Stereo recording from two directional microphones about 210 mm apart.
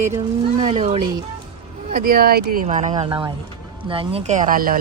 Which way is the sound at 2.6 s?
35° right (ahead or behind).